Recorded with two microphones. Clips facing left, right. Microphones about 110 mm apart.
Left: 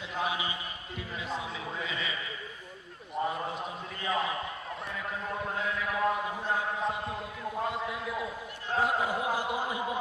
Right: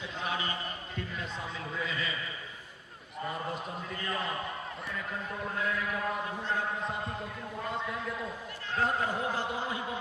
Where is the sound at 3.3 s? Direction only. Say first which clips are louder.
Left 1 dB; centre (ahead or behind).